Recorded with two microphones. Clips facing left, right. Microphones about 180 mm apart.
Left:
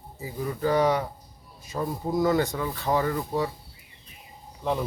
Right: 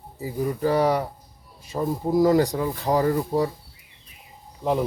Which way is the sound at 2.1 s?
35° right (ahead or behind).